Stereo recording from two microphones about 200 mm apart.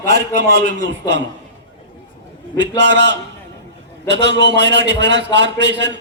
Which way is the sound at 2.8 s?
60° right (ahead or behind).